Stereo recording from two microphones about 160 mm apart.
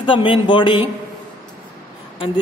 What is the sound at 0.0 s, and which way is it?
Speech, 30° left (ahead or behind).